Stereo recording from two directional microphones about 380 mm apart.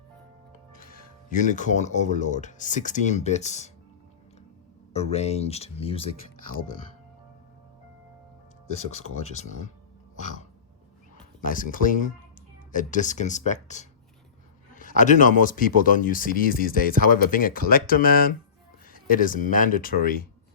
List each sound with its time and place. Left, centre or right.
0.7 s speech: left
4.9 s speech: centre
9.4 s speech: centre
11.3 s speech: left